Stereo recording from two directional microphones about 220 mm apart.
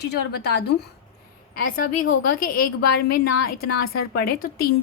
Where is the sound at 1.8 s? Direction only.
40° left (ahead or behind).